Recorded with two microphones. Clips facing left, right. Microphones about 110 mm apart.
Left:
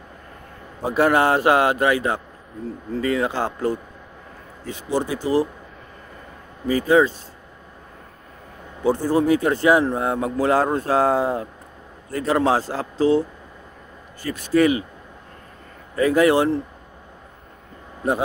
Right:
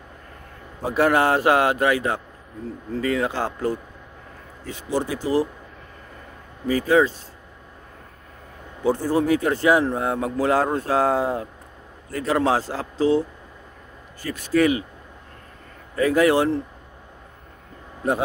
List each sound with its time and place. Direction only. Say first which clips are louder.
0.9 s speech: left 1 dB; 20° left (ahead or behind)
4.9 s speech: left 1 dB; 20° left (ahead or behind)
6.7 s speech: left 2 dB; 20° left (ahead or behind)
8.8 s speech: left 2 dB; 25° left (ahead or behind)
14.2 s speech: left 2 dB; 25° left (ahead or behind)
16.0 s speech: left 1 dB; 25° left (ahead or behind)